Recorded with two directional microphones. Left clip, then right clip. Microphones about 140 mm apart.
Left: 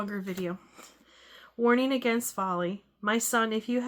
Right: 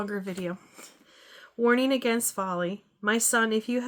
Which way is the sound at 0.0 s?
30° right (ahead or behind).